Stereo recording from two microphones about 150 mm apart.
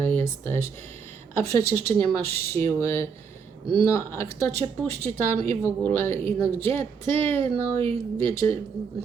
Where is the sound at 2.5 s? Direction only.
15° left (ahead or behind).